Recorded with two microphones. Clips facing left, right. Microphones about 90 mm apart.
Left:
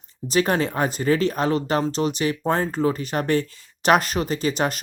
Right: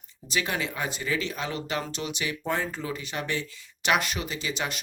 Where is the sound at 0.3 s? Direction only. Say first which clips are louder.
Left 9 dB; 40° left (ahead or behind).